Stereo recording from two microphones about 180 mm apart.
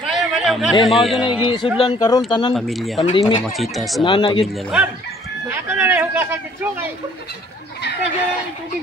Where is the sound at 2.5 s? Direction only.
Centre (ahead or behind).